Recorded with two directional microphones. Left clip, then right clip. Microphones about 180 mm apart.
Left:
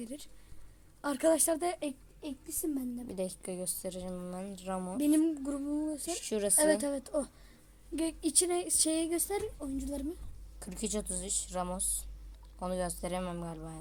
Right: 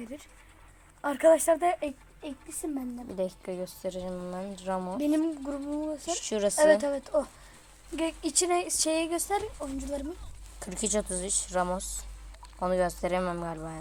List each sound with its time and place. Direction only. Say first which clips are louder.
1.0 s a woman's voice: right 7 dB; 35° left (ahead or behind)
3.1 s a woman's voice: right 8 dB; 5° left (ahead or behind)
4.9 s speech: left 2 dB; 25° left (ahead or behind)
6.1 s speech: right 7 dB; 10° left (ahead or behind)
6.6 s speech: right 8 dB; 25° left (ahead or behind)
10.6 s a woman's voice: right 7 dB; 5° left (ahead or behind)